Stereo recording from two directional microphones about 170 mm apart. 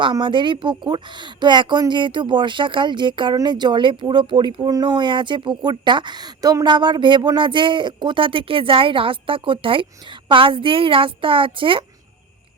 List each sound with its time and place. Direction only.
0.0 s speech: 30° right (ahead or behind)